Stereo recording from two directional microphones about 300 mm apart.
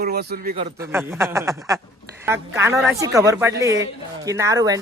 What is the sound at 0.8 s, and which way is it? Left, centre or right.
Speech, centre.